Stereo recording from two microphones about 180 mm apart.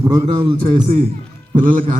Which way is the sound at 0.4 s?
35° right (ahead or behind).